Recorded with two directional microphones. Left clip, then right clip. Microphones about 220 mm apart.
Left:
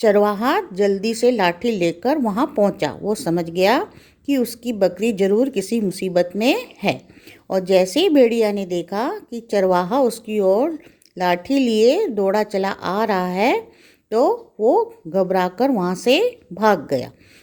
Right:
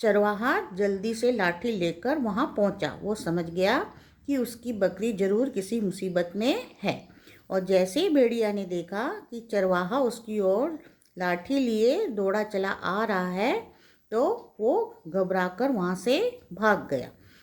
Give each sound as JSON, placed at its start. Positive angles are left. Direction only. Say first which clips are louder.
{"t": 0.0, "sound": "a woman's voice", "louder": "left 8 dB", "side_deg": 40}